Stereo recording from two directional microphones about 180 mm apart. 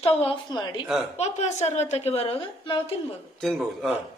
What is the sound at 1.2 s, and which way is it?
A woman's voice, 40° left (ahead or behind).